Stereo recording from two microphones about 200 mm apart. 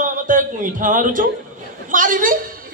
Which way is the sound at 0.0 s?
40° right (ahead or behind).